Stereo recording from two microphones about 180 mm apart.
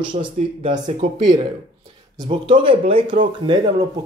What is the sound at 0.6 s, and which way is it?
Speech, 30° right (ahead or behind).